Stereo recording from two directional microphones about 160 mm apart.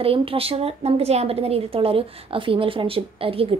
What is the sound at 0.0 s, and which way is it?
A woman's voice, 35° right (ahead or behind).